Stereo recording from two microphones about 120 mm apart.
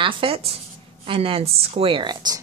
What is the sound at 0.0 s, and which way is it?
Speech, 45° right (ahead or behind).